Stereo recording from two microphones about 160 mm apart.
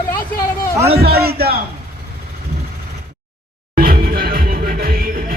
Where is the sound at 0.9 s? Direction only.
75° right (ahead or behind).